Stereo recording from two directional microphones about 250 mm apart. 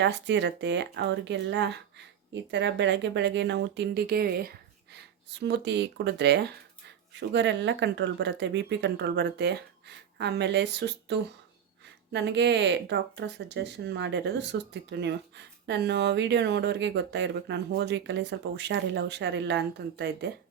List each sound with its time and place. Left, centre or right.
0.0 s speech: right